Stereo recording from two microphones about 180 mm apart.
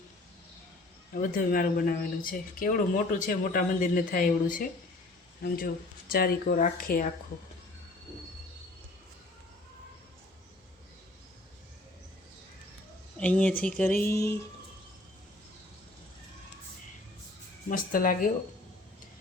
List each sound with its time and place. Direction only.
1.1 s speech: 50° left (ahead or behind)
13.1 s speech: 5° left (ahead or behind)
17.7 s speech: 50° left (ahead or behind)